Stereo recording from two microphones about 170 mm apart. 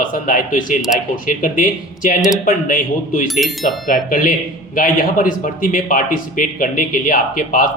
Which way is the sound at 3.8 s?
50° left (ahead or behind).